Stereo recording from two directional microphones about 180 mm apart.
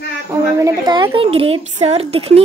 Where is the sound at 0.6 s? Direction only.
25° right (ahead or behind).